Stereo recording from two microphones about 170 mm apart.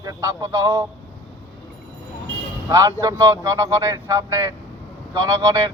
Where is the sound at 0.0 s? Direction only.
20° right (ahead or behind).